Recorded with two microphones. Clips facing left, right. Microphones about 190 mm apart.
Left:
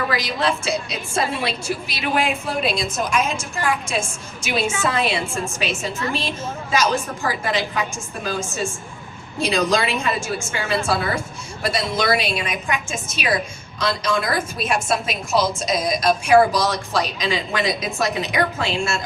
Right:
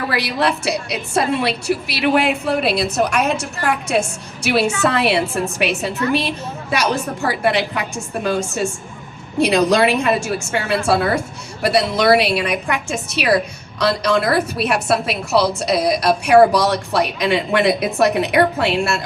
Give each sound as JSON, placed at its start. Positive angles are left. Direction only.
{"t": 0.1, "sound": "a woman's voice", "side_deg": -65}